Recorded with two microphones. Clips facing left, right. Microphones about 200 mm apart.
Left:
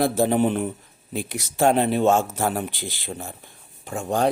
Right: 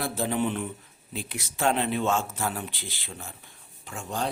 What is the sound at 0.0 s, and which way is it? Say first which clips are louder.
Speech: left 8 dB; 45° left (ahead or behind).